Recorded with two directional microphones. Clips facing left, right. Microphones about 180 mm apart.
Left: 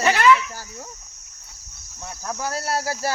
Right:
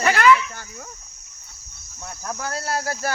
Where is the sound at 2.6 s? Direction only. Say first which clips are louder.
Even; 30° left (ahead or behind).